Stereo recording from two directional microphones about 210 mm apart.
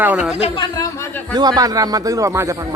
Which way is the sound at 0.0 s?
5° right (ahead or behind).